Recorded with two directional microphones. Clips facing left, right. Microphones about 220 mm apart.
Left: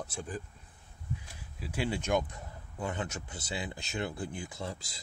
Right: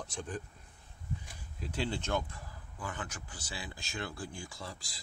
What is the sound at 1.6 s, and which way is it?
Speech, 10° left (ahead or behind).